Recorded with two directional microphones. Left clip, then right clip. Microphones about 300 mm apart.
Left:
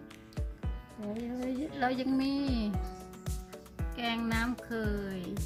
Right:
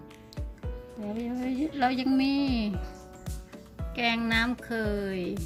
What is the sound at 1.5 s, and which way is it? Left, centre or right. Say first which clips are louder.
Music: right 5 dB; centre.